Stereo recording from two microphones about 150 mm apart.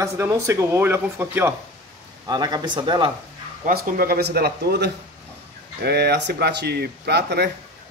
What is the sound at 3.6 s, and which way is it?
Speech, 70° right (ahead or behind).